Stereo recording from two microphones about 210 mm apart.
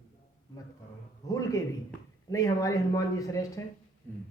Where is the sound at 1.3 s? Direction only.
15° left (ahead or behind).